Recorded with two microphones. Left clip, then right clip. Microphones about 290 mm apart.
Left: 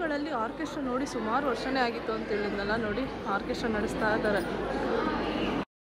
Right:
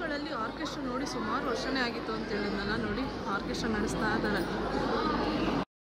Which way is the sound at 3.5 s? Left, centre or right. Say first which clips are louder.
Left 2 dB; centre.